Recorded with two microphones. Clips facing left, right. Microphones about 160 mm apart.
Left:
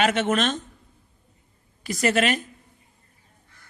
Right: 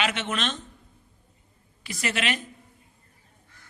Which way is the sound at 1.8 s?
45° left (ahead or behind).